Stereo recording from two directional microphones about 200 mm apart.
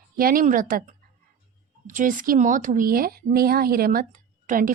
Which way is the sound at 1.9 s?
40° right (ahead or behind).